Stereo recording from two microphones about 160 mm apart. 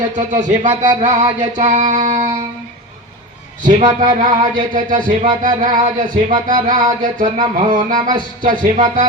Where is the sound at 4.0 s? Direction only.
50° right (ahead or behind).